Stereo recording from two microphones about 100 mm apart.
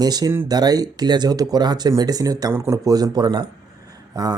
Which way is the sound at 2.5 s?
25° right (ahead or behind).